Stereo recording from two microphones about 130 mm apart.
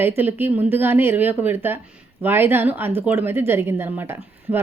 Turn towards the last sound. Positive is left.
turn(degrees=-15)  # may be behind; listen again after turning